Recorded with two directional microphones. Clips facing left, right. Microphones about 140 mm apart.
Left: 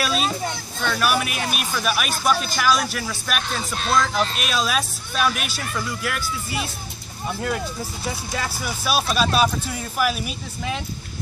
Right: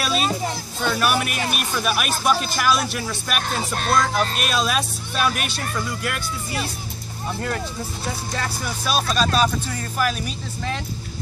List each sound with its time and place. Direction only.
0.0 s speech: centre (ahead or behind)
3.4 s music: 50° right (ahead or behind)
4.4 s speech: centre (ahead or behind)